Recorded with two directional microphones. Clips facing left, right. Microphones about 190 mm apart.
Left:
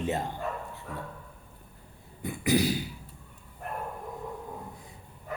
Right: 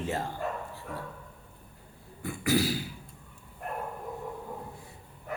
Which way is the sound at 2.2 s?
15° left (ahead or behind).